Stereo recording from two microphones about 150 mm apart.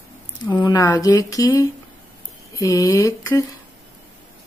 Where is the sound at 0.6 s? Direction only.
25° left (ahead or behind).